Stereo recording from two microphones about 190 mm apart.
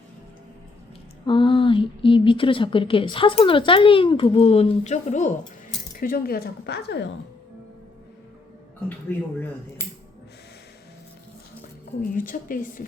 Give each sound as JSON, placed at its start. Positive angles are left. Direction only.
{"t": 1.3, "sound": "a woman's voice", "side_deg": 25}
{"t": 6.0, "sound": "speech", "side_deg": 50}
{"t": 12.1, "sound": "a woman's voice", "side_deg": 45}